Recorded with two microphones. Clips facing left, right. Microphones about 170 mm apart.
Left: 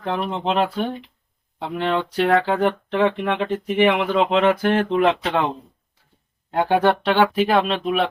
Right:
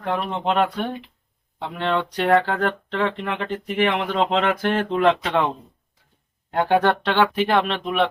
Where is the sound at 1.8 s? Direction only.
5° left (ahead or behind).